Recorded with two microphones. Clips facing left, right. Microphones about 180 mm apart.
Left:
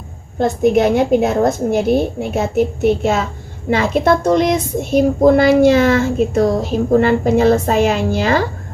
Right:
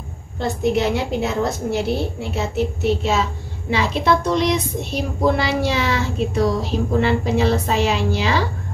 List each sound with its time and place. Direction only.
0.4 s speech: 50° left (ahead or behind)